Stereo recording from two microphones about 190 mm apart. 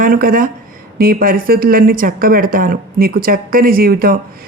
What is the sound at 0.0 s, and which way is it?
Speech, 50° right (ahead or behind).